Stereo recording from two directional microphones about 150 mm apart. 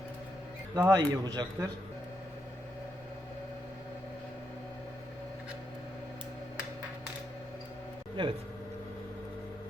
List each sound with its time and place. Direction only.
0.8 s a man's voice: 25° right (ahead or behind)
8.2 s speech: 30° right (ahead or behind)